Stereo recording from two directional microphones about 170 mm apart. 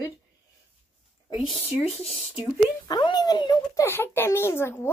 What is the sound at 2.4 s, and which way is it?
Speech, 25° left (ahead or behind).